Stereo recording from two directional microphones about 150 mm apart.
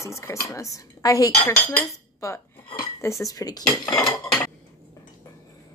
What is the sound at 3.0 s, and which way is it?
Speech, 20° left (ahead or behind).